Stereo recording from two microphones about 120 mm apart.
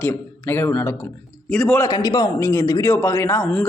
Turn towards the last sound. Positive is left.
turn(degrees=10)  # may be behind; listen again after turning